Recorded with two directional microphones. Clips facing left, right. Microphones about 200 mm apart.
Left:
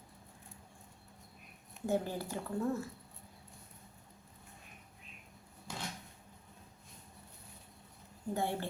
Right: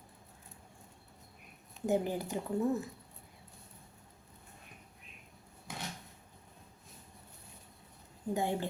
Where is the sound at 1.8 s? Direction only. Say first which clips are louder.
Right 3 dB; 15° right (ahead or behind).